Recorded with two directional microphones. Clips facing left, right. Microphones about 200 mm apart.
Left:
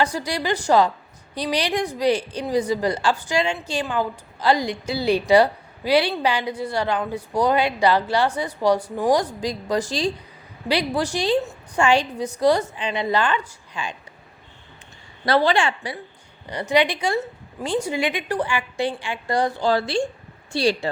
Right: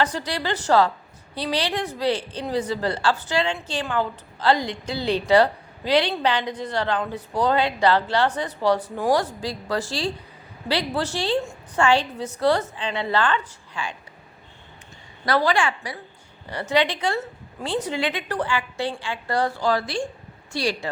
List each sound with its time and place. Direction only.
0.0 s a woman's voice: 10° left (ahead or behind)
15.3 s a woman's voice: 25° left (ahead or behind)
19.6 s a woman's voice: 25° left (ahead or behind)